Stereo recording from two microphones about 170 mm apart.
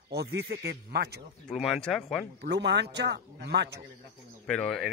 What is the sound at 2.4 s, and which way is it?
A man's voice, 85° right.